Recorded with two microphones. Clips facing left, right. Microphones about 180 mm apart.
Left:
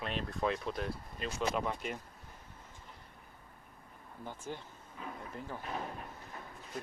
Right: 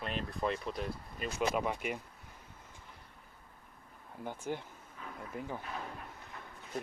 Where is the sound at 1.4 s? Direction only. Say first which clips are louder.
Right 2 dB; 10° right (ahead or behind).